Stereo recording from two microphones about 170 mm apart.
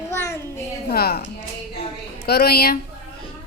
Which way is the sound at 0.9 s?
65° left (ahead or behind).